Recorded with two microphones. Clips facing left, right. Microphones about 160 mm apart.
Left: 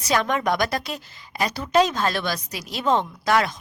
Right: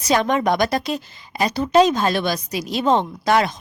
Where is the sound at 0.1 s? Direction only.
20° right (ahead or behind).